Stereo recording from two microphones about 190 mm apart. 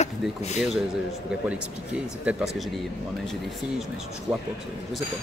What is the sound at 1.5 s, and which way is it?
Speech, 5° right (ahead or behind).